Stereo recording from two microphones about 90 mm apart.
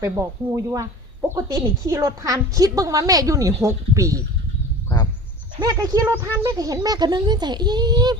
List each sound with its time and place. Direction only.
0.0 s a woman's voice: 40° right (ahead or behind)
5.6 s a child's voice: 45° right (ahead or behind)